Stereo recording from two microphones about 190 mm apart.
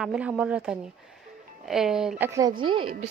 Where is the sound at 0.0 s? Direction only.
5° right (ahead or behind).